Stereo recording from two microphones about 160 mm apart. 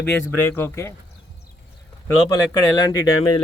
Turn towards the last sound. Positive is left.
turn(degrees=25)  # may be behind; listen again after turning